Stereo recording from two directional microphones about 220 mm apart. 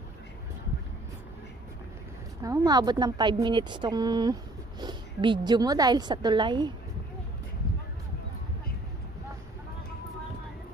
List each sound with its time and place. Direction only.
2.4 s speech: 15° right (ahead or behind)